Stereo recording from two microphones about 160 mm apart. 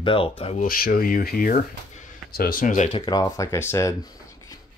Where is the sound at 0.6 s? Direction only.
65° left (ahead or behind).